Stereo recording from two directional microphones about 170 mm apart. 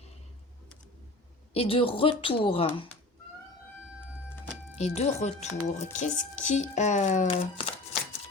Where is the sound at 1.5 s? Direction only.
35° left (ahead or behind).